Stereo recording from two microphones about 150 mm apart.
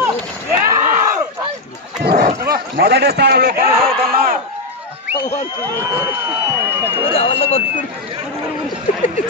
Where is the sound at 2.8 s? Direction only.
90° right.